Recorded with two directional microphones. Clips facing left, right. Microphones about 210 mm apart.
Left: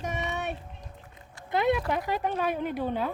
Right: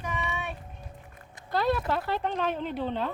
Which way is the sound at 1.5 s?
20° left (ahead or behind).